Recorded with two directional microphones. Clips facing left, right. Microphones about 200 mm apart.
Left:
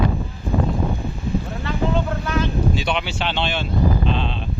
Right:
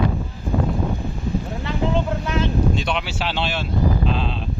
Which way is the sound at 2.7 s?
Centre (ahead or behind).